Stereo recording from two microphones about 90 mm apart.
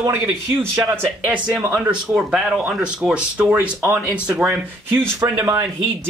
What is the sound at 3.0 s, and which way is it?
Speech, 10° right (ahead or behind).